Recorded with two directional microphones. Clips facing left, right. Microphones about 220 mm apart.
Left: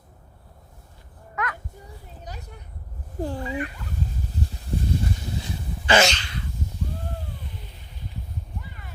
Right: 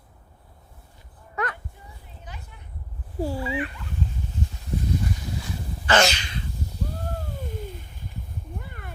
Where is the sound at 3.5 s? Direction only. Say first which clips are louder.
Even; 40° left (ahead or behind).